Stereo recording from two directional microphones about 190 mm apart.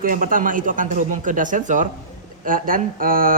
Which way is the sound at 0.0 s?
45° right (ahead or behind).